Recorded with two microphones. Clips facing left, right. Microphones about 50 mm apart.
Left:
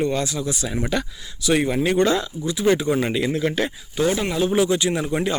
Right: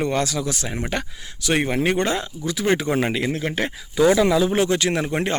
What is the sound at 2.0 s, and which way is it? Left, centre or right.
Speech, right.